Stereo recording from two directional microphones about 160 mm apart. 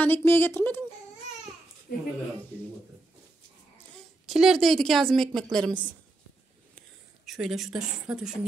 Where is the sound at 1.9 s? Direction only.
65° left (ahead or behind).